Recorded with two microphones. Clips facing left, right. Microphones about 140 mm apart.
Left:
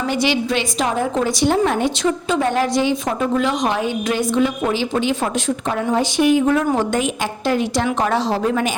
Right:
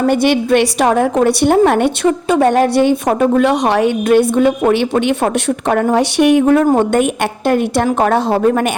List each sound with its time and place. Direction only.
0.0 s a woman's voice: 55° right (ahead or behind)